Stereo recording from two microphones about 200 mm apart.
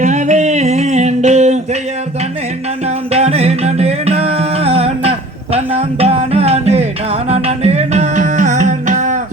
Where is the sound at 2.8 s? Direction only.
30° right (ahead or behind).